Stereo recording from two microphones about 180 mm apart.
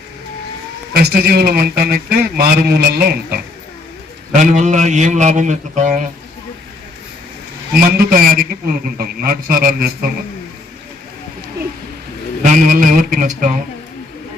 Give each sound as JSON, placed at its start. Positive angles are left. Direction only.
{"t": 0.9, "sound": "a man's voice", "side_deg": -60}
{"t": 4.4, "sound": "a man's voice", "side_deg": -40}
{"t": 7.8, "sound": "a man's voice", "side_deg": -50}
{"t": 12.4, "sound": "a man's voice", "side_deg": -45}